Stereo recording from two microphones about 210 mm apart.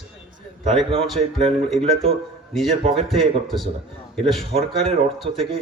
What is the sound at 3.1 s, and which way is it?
A man's voice, centre (ahead or behind).